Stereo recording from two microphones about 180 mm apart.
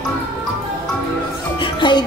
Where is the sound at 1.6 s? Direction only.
25° left (ahead or behind).